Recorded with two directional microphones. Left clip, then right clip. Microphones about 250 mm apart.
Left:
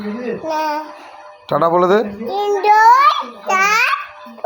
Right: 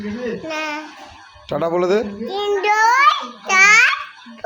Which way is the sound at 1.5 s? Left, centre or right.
Centre.